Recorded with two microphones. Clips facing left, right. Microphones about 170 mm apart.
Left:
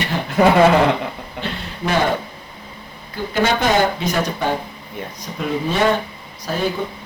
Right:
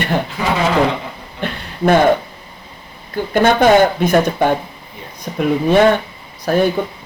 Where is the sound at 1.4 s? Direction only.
50° right (ahead or behind).